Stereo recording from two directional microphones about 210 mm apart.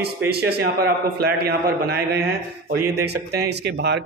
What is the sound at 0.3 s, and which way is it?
Speech, 50° right (ahead or behind).